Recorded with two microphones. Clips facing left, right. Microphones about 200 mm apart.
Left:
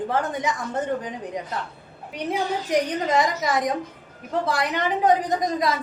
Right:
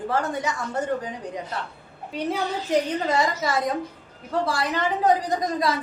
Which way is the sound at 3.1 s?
20° left (ahead or behind).